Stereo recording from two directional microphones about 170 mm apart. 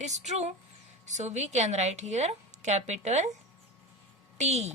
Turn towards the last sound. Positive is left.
turn(degrees=-40)  # may be behind; listen again after turning